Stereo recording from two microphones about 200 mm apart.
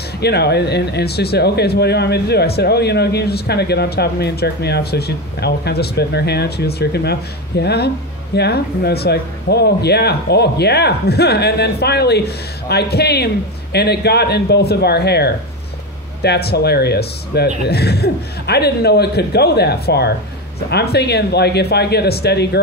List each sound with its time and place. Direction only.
0.2 s speech: 55° left (ahead or behind)